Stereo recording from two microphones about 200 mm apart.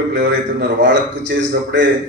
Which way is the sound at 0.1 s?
60° right (ahead or behind).